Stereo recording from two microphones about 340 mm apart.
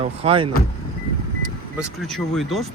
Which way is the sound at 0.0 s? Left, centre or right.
Centre.